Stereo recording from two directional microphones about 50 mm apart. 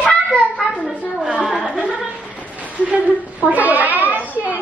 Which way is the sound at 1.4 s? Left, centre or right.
Centre.